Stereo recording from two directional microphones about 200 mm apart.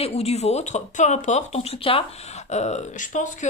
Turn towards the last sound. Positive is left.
turn(degrees=35)  # may be behind; listen again after turning